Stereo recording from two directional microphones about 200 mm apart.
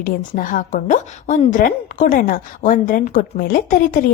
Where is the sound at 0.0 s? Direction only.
45° left (ahead or behind).